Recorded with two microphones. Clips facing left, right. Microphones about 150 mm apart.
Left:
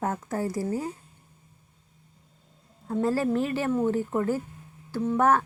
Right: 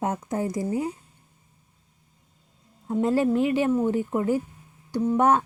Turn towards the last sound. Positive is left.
turn(degrees=-20)  # may be behind; listen again after turning